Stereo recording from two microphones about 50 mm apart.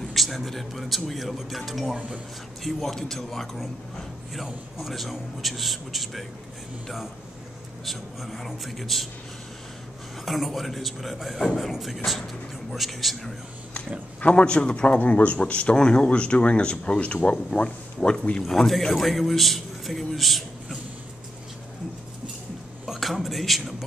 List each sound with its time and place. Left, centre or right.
0.1 s a man's voice: centre
7.8 s a man's voice: centre
10.2 s a man's voice: centre
14.2 s a man's voice: left
18.4 s a man's voice: centre
22.8 s speech: centre